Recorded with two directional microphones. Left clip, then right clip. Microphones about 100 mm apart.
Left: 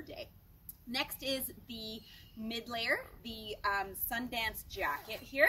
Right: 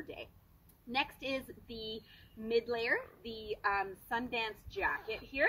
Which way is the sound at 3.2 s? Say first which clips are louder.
Right 1 dB; 45° right (ahead or behind).